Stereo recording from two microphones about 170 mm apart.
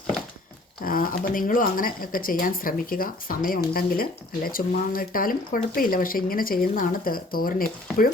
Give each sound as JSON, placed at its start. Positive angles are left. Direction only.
{"t": 0.9, "sound": "speech", "side_deg": 55}